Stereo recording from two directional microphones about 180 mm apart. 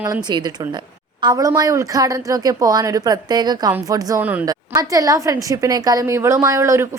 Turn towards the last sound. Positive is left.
turn(degrees=-15)  # may be behind; listen again after turning